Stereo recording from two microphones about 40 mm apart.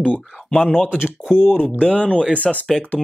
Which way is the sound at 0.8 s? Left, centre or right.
Right.